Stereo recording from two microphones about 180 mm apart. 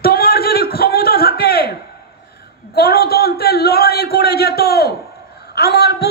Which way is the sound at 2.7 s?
60° left (ahead or behind).